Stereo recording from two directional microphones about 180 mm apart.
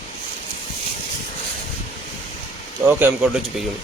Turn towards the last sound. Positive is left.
turn(degrees=-10)  # may be behind; listen again after turning